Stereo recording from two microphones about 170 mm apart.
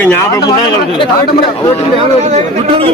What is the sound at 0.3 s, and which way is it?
Speech, 25° left (ahead or behind).